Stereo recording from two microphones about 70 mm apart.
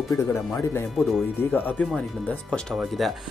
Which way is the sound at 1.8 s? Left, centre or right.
Left.